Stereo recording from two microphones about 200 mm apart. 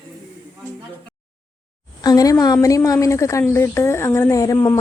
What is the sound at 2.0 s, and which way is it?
A woman's voice, 20° left (ahead or behind).